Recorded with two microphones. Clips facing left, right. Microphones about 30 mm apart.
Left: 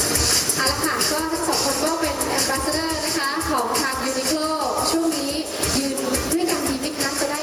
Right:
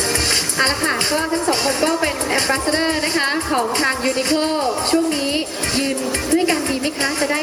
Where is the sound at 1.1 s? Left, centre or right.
Right.